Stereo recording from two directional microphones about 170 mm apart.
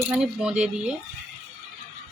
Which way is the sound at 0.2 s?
5° right (ahead or behind).